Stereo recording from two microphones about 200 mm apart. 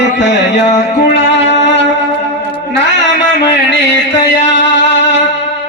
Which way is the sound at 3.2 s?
60° left (ahead or behind).